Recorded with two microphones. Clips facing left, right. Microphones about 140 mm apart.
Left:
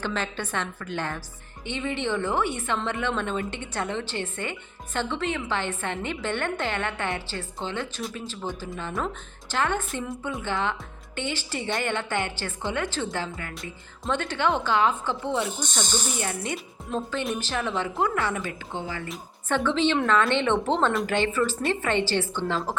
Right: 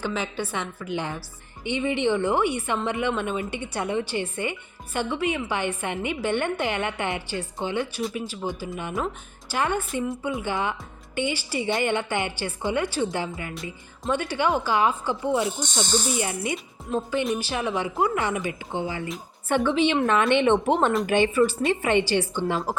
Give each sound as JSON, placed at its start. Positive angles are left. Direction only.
{"t": 0.0, "sound": "speech", "side_deg": -10}
{"t": 13.5, "sound": "speech", "side_deg": 0}